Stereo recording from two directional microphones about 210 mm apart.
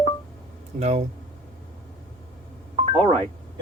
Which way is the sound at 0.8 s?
30° right (ahead or behind).